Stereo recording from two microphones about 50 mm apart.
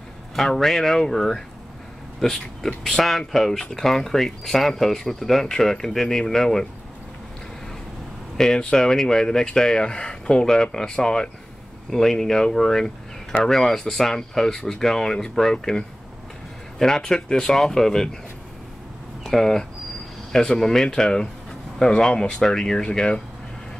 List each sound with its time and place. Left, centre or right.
0.5 s speech: centre
8.4 s speech: centre
19.2 s speech: centre